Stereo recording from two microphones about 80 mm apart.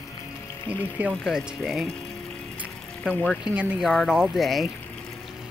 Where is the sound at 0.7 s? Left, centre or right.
Centre.